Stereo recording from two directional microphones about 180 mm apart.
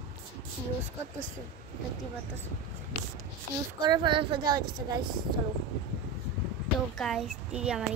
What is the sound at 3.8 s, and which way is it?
A woman's voice, 25° right (ahead or behind).